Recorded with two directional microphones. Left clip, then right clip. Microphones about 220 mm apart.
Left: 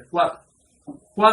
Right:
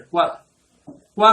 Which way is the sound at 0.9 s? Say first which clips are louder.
Left 3 dB; 45° left (ahead or behind).